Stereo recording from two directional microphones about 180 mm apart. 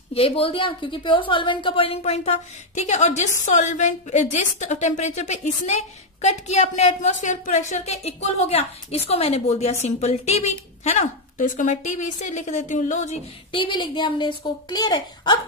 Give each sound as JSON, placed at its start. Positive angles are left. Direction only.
{"t": 0.1, "sound": "a woman's voice", "side_deg": 30}